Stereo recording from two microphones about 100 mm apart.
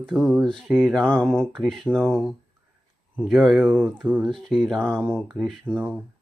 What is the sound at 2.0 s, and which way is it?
Speech, 15° right (ahead or behind).